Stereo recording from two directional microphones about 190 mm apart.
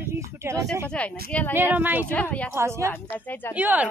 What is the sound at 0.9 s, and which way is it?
Speech, 5° left (ahead or behind).